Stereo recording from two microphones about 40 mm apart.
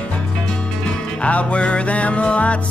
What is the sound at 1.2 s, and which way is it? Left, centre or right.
Music, left.